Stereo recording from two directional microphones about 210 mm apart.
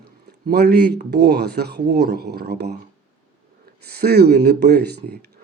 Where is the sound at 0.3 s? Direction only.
50° right (ahead or behind).